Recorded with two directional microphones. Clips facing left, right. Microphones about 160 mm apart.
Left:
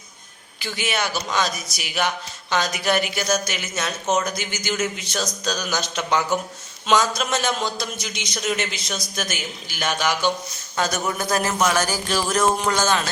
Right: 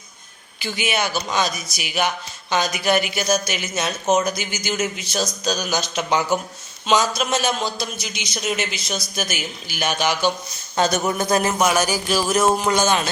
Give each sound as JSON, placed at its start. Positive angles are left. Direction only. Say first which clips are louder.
{"t": 0.6, "sound": "a man's voice", "louder": "right 2 dB", "side_deg": -5}
{"t": 9.8, "sound": "a man's voice", "louder": "right 1 dB", "side_deg": -25}